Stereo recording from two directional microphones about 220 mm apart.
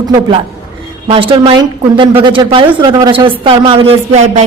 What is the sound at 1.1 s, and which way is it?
A woman's voice, 25° right (ahead or behind).